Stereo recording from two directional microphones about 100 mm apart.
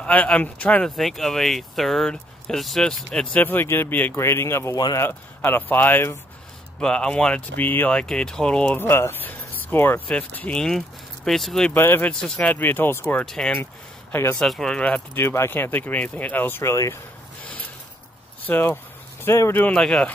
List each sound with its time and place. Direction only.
0.0 s speech: 15° left (ahead or behind)
0.8 s speech: 5° left (ahead or behind)
3.3 s speech: 20° left (ahead or behind)
6.8 s speech: 10° left (ahead or behind)
8.7 s speech: 25° left (ahead or behind); by 11.7 s 5° left (ahead or behind)
11.7 s speech: 20° left (ahead or behind)
12.1 s speech: 5° left (ahead or behind)
13.2 s speech: 5° left (ahead or behind)
15.2 s speech: 25° left (ahead or behind)
16.7 s speech: 35° left (ahead or behind)
18.5 s speech: 20° left (ahead or behind)
19.6 s speech: 5° left (ahead or behind)